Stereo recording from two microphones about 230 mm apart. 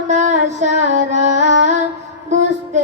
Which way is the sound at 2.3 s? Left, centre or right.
Right.